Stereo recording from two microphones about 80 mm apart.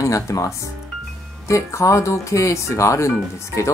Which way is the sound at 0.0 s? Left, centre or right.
Left.